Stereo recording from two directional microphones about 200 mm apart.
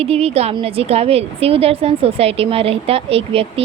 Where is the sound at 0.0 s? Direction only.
30° right (ahead or behind).